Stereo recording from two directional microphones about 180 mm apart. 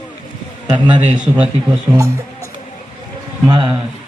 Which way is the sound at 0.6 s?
25° right (ahead or behind).